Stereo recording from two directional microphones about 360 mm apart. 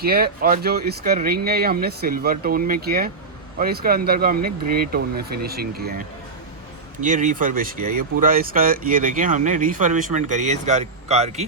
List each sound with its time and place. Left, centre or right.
0.0 s speech: right